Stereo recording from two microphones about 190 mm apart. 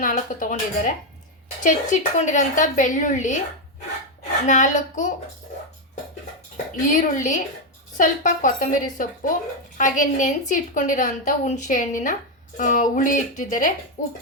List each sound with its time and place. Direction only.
0.0 s a woman's voice: 45° left (ahead or behind)
4.4 s a woman's voice: 40° left (ahead or behind)
6.7 s a woman's voice: 45° left (ahead or behind)